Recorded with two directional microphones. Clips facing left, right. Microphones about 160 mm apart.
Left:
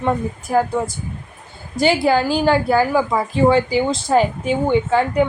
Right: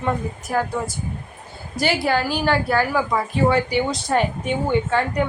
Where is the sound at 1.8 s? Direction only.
25° left (ahead or behind).